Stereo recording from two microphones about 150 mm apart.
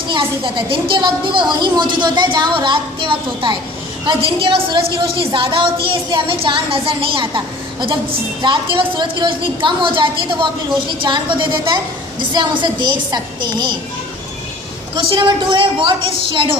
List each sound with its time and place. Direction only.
0.1 s a woman's voice: 30° right (ahead or behind)
14.9 s a woman's voice: 30° right (ahead or behind)